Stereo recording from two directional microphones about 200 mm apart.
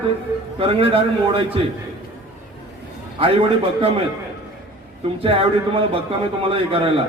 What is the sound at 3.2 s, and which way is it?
Speech, 30° right (ahead or behind).